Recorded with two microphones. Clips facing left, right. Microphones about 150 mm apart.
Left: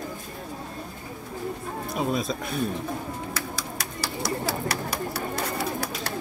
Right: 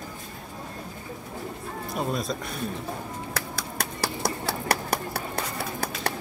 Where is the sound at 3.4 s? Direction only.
60° right (ahead or behind).